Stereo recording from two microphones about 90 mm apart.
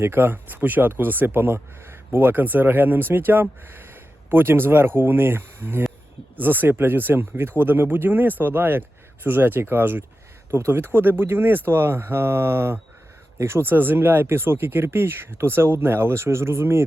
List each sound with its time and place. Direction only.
0.0 s speech: 25° right (ahead or behind)